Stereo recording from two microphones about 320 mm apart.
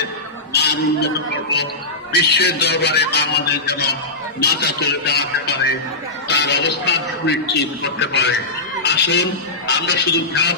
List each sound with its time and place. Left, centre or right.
0.5 s a man's voice: left